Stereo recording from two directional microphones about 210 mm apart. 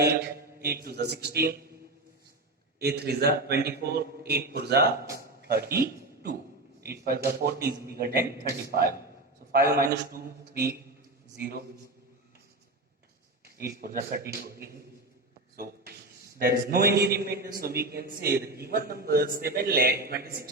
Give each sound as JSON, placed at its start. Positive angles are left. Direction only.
{"t": 0.0, "sound": "a man's voice", "side_deg": -50}
{"t": 2.7, "sound": "a man's voice", "side_deg": -50}
{"t": 9.4, "sound": "a sound", "side_deg": -50}
{"t": 10.1, "sound": "a man's voice", "side_deg": -45}
{"t": 13.4, "sound": "a man's voice", "side_deg": -50}